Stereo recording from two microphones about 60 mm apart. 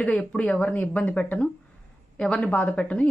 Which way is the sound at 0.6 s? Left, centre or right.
Left.